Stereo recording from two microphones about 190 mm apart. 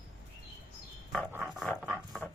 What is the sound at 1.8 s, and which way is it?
Dog, centre (ahead or behind).